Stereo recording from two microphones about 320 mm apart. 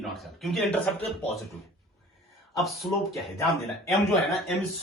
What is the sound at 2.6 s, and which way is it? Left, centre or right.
Speech, centre.